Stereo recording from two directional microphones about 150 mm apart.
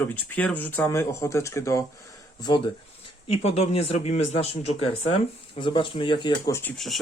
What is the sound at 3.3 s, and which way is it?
Speech, 45° left (ahead or behind).